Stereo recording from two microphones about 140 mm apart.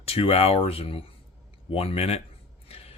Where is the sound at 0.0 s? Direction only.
45° left (ahead or behind).